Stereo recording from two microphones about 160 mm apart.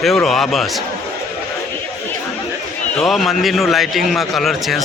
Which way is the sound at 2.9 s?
Centre (ahead or behind).